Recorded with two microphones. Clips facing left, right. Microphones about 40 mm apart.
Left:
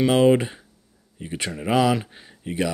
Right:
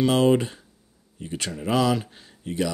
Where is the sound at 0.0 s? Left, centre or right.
Centre.